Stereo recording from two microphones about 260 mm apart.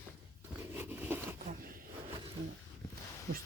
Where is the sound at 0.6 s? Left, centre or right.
Centre.